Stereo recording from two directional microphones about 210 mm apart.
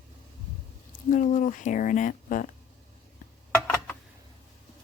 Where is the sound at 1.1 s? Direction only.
35° left (ahead or behind).